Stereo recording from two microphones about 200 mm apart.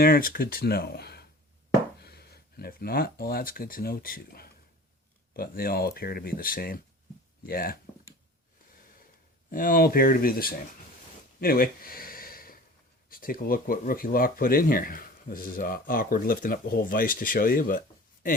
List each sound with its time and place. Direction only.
0.0 s speech: 45° left (ahead or behind)
9.5 s speech: 45° left (ahead or behind)
11.3 s a sound: 50° left (ahead or behind)
13.1 s speech: 45° left (ahead or behind)